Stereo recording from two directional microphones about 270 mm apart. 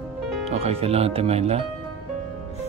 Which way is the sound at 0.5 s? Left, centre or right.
Right.